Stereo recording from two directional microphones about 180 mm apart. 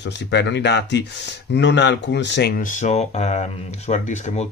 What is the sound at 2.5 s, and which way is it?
Speech, 45° left (ahead or behind).